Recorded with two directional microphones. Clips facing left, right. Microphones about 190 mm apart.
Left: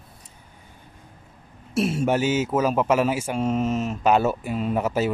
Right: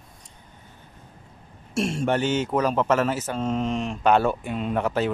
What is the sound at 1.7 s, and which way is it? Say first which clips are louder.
Speech: left 2 dB; 5° left (ahead or behind).